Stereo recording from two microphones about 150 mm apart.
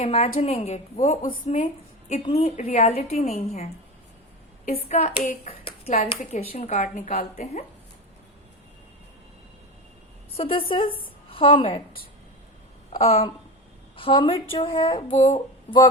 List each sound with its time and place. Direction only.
0.0 s a woman's voice: 45° left (ahead or behind)
10.3 s a woman's voice: 40° left (ahead or behind)
13.0 s a woman's voice: 45° left (ahead or behind)